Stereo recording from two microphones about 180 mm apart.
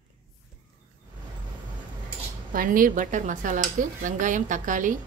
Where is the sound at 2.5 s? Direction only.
50° right (ahead or behind).